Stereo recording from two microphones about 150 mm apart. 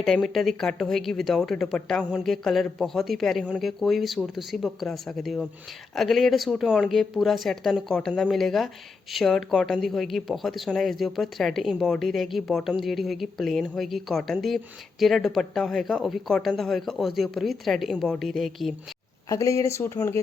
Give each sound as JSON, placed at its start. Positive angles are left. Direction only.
{"t": 0.0, "sound": "speech", "side_deg": 0}
{"t": 19.3, "sound": "speech", "side_deg": 20}